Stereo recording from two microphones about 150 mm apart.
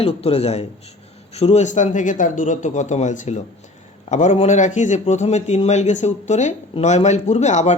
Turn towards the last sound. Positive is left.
turn(degrees=50)  # may be behind; listen again after turning